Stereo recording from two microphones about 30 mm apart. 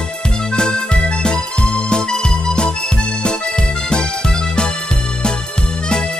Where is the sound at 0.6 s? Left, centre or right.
Left.